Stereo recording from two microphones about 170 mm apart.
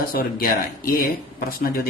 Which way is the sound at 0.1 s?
60° left (ahead or behind).